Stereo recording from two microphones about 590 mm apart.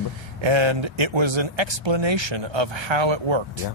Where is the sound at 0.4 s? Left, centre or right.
Right.